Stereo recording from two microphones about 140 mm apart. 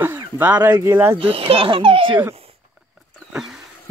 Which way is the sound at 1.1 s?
40° right (ahead or behind).